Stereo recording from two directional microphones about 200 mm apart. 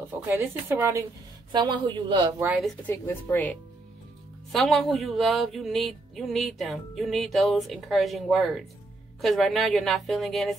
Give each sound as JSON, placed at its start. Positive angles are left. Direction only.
{"t": 0.3, "sound": "speech", "side_deg": -10}
{"t": 2.4, "sound": "speech", "side_deg": -5}
{"t": 2.9, "sound": "speech", "side_deg": 10}